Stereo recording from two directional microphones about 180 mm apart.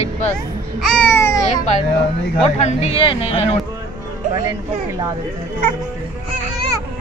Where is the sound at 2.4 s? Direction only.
35° left (ahead or behind).